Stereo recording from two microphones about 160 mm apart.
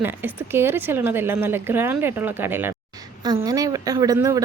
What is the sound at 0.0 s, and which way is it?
A woman's voice, 10° right (ahead or behind).